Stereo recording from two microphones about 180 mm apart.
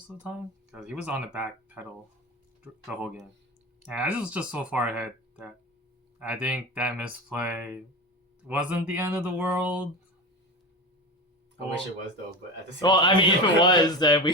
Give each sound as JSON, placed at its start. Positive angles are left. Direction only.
{"t": 0.2, "sound": "speech", "side_deg": -5}
{"t": 2.8, "sound": "speech", "side_deg": -5}
{"t": 12.8, "sound": "speech", "side_deg": 25}